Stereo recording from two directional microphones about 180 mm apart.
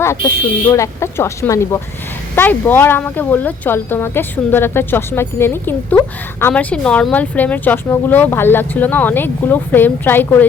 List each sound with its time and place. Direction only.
0.0 s speech: 15° left (ahead or behind)